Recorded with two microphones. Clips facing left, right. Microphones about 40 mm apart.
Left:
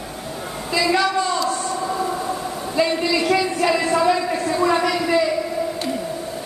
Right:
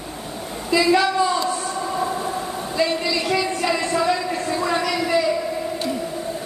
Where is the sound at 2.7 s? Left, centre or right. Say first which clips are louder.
Left 2 dB; centre.